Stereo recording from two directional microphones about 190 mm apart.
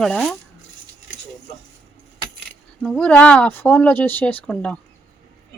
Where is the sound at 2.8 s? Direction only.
5° left (ahead or behind).